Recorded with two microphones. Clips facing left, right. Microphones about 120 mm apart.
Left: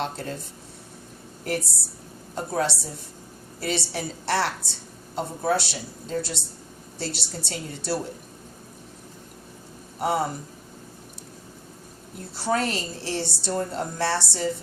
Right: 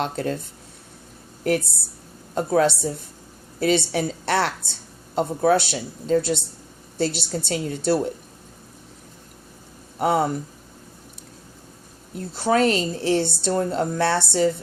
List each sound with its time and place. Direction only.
0.0 s a woman's voice: 60° right (ahead or behind)
2.3 s a woman's voice: 60° right (ahead or behind)
10.0 s a woman's voice: 60° right (ahead or behind)
12.3 s a woman's voice: 60° right (ahead or behind)